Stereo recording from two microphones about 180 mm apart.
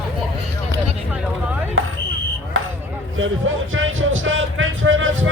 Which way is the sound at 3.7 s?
90° right.